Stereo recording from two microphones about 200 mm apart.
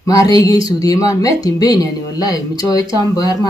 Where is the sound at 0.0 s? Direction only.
15° left (ahead or behind).